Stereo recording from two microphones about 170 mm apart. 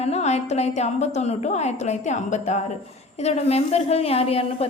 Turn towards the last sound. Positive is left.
turn(degrees=35)  # may be behind; listen again after turning